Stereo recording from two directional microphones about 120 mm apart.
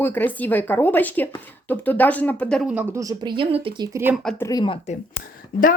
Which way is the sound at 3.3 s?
50° right (ahead or behind).